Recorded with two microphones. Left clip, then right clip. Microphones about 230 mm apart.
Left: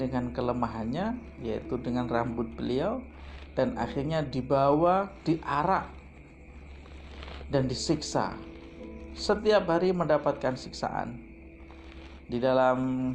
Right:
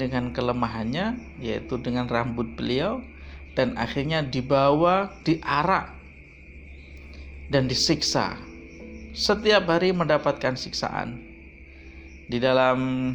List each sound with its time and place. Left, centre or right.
0.0 s speech: right
7.5 s speech: right
12.3 s speech: right